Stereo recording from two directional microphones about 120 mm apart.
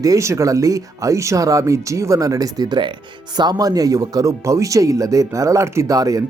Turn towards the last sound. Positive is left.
turn(degrees=-30)  # may be behind; listen again after turning